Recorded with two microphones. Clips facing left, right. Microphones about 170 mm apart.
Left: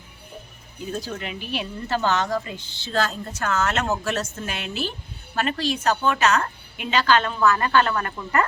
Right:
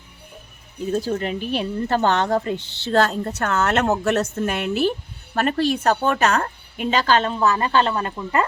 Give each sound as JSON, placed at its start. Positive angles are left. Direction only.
{"t": 1.1, "sound": "a woman's voice", "side_deg": -40}